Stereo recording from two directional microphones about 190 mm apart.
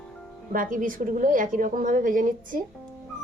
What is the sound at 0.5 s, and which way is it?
A woman's voice, 45° right (ahead or behind).